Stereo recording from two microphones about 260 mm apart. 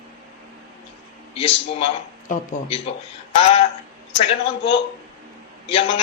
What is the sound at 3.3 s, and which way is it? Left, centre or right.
Speech, left.